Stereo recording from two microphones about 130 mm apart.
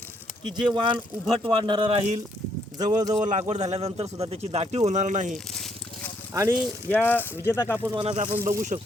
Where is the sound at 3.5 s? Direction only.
55° right (ahead or behind).